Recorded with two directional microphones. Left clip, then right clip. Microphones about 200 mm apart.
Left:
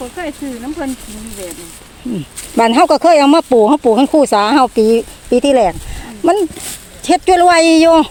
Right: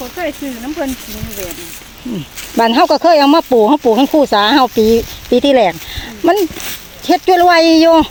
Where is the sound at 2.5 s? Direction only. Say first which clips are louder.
Left 1 dB; 10° left (ahead or behind).